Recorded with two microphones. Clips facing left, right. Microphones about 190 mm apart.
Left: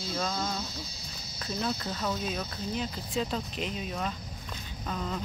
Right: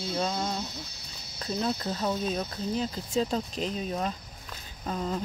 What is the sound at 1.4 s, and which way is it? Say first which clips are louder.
Speech: right 3 dB; 30° right (ahead or behind).